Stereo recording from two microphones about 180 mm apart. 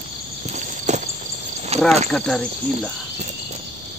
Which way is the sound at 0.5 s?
40° right (ahead or behind).